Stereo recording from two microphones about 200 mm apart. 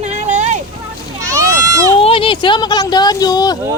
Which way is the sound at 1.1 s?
15° right (ahead or behind).